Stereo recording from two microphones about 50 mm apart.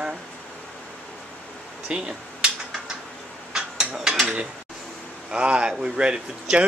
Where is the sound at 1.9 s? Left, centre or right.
Centre.